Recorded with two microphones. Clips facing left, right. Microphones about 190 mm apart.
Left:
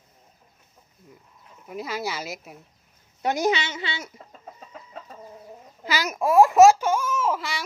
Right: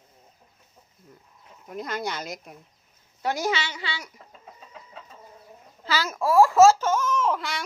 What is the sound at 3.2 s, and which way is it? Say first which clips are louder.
Speech: left 3 dB; 20° left (ahead or behind).